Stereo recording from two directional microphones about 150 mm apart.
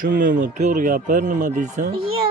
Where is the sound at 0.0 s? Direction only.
65° right (ahead or behind).